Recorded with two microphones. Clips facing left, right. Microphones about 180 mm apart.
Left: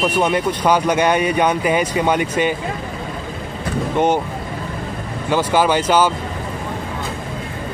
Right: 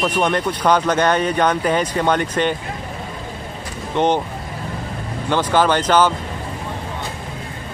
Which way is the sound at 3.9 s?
10° left (ahead or behind).